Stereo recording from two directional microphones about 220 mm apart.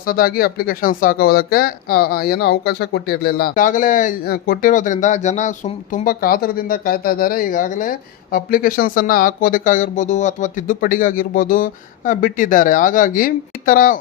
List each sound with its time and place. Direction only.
0.0 s speech: 40° left (ahead or behind)